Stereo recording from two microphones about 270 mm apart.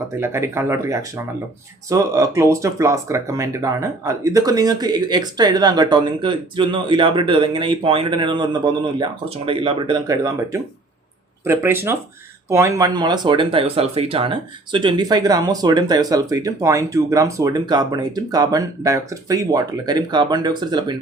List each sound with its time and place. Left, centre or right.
0.2 s speech: centre